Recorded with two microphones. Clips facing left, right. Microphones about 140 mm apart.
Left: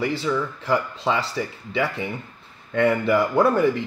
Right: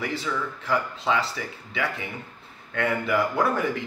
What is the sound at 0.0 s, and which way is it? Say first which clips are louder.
Speech: left 5 dB; 30° left (ahead or behind).